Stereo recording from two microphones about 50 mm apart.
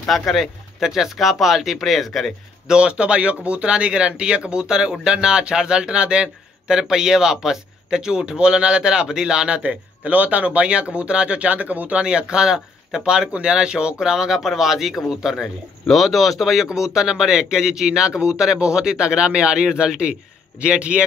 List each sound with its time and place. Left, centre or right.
0.3 s speech: centre
2.7 s speech: centre
12.0 s a man's voice: centre
15.3 s a man's voice: centre; by 20.7 s right